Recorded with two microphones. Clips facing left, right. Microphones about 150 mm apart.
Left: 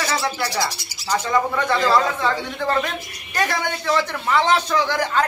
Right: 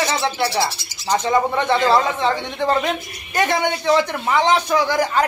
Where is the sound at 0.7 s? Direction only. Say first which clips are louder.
Even; 10° left (ahead or behind).